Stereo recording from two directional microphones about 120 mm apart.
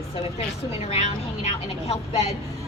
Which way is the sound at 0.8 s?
60° left (ahead or behind).